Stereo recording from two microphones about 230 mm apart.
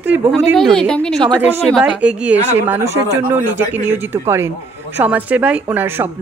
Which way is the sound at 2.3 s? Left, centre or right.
Right.